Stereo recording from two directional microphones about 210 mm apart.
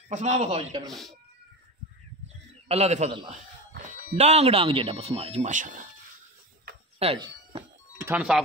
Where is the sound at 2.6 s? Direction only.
30° right (ahead or behind).